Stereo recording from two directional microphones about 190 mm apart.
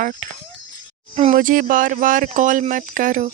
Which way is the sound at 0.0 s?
45° right (ahead or behind).